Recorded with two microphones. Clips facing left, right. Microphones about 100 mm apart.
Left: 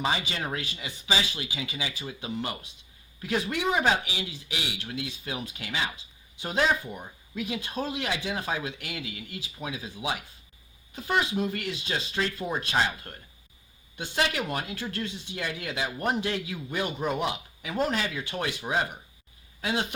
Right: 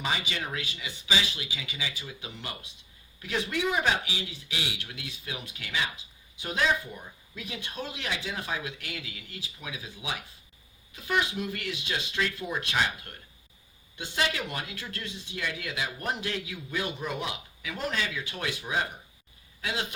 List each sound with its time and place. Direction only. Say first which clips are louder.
0.0 s speech: left 3 dB; 35° left (ahead or behind)